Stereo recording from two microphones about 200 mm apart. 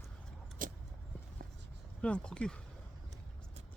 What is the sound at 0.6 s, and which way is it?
Vehicle, 40° right (ahead or behind).